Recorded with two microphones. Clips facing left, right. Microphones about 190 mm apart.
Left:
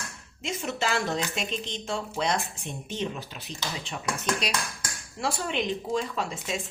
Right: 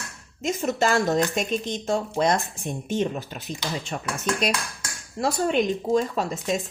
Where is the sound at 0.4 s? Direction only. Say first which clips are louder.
Right 7 dB; 40° right (ahead or behind).